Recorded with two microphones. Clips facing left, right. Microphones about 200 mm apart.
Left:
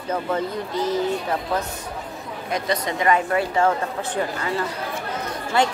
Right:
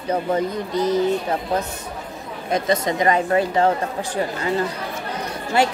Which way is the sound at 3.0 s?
25° right (ahead or behind).